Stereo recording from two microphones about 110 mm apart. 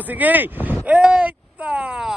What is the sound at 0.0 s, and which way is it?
Speech, 15° right (ahead or behind).